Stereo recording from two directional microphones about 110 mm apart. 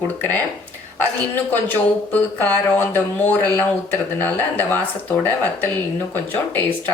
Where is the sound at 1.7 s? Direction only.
15° left (ahead or behind).